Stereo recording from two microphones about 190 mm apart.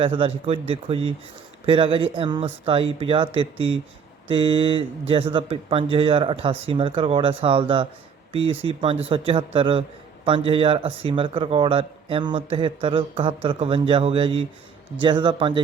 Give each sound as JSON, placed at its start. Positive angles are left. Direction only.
{"t": 0.0, "sound": "speech", "side_deg": -30}